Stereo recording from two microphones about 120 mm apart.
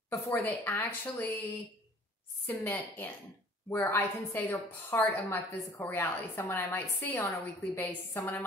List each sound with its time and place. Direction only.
0.1 s a woman's voice: 15° left (ahead or behind)
2.4 s a woman's voice: 15° left (ahead or behind)